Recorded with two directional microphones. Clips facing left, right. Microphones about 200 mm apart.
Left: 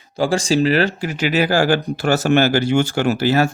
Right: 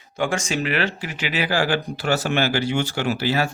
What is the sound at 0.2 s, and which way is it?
Speech, 35° left (ahead or behind).